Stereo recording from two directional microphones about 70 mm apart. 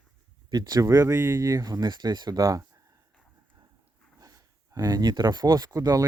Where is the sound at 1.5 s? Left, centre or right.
Right.